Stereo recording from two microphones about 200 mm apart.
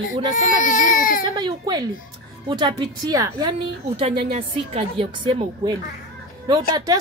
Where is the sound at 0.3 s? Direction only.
40° left (ahead or behind).